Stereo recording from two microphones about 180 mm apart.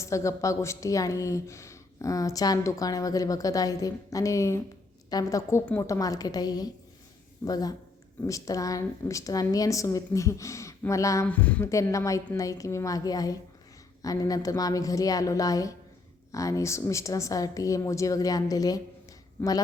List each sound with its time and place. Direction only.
0.0 s a woman's voice: 15° left (ahead or behind)